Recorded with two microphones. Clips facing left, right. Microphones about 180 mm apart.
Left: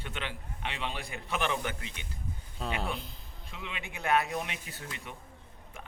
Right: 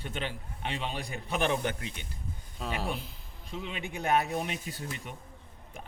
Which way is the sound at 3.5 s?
40° right (ahead or behind).